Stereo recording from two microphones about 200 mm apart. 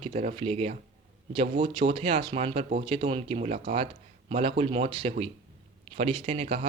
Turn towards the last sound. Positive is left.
turn(degrees=-30)  # may be behind; listen again after turning